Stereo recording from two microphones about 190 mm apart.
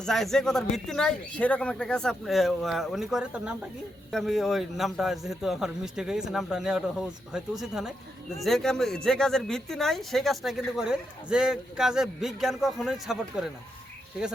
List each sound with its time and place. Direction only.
0.0 s speech: centre (ahead or behind)